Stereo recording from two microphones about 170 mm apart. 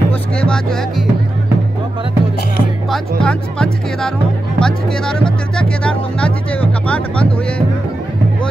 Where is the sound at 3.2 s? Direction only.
5° left (ahead or behind).